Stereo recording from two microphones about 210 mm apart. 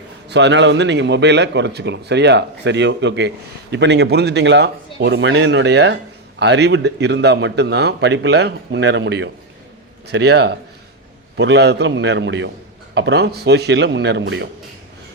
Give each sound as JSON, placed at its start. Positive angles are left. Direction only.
{"t": 0.3, "sound": "a man's voice", "side_deg": -55}